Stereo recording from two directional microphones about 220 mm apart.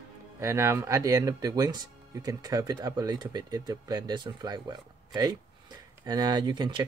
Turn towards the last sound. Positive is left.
turn(degrees=-20)  # may be behind; listen again after turning